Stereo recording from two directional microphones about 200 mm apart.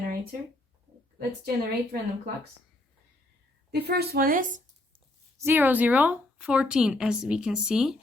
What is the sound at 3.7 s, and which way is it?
Speech, 55° right (ahead or behind).